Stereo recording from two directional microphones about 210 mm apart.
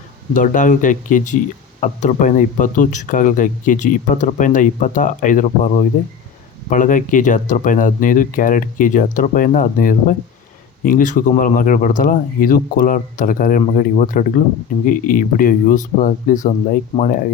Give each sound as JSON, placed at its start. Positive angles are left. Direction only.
{"t": 0.3, "sound": "speech", "side_deg": 40}